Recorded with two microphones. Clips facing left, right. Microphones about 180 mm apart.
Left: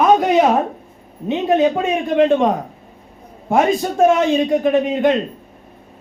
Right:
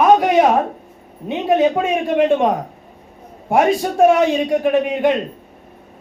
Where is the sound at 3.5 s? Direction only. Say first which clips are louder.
Even; 10° right (ahead or behind).